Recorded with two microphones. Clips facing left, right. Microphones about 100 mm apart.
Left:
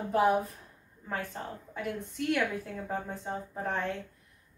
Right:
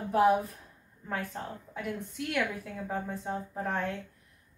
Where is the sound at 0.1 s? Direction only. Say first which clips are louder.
Right 2 dB; centre (ahead or behind).